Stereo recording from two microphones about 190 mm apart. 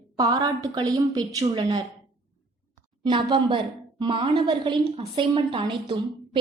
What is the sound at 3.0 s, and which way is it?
A woman's voice, 25° right (ahead or behind).